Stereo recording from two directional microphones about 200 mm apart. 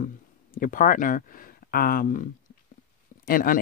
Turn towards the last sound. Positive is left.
turn(degrees=45)  # may be behind; listen again after turning